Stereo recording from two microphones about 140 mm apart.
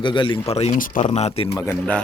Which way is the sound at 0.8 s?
65° left (ahead or behind).